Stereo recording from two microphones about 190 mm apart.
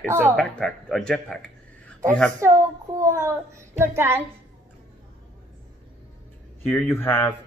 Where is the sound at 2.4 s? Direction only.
15° right (ahead or behind).